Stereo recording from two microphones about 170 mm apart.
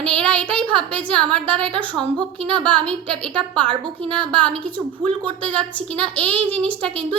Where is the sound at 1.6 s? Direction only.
30° right (ahead or behind).